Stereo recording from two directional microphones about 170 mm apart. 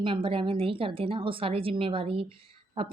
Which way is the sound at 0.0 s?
30° right (ahead or behind).